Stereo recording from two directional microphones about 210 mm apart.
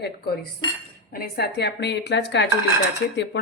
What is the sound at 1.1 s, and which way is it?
A woman's voice, 45° left (ahead or behind).